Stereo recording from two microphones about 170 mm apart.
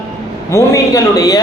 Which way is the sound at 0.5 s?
20° left (ahead or behind).